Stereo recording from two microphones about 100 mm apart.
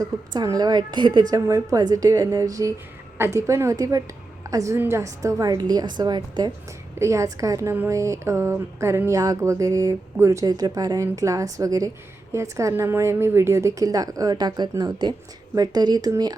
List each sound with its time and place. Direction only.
0.0 s a woman's voice: 35° right (ahead or behind)
7.0 s speech: 30° right (ahead or behind)